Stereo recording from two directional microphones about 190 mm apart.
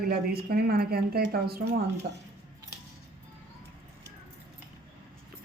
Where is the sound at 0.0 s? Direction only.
55° right (ahead or behind).